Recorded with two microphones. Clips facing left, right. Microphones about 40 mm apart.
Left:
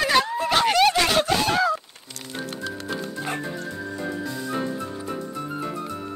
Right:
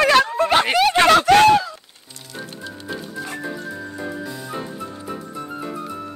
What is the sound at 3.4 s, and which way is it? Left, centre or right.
Music, centre.